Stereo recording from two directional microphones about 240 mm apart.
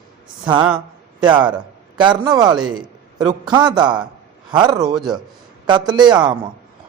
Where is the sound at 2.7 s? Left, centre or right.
Centre.